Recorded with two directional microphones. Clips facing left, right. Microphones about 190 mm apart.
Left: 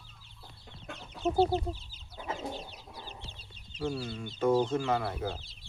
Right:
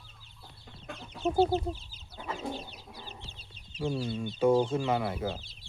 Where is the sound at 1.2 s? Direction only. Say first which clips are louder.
Right 1 dB; 10° right (ahead or behind).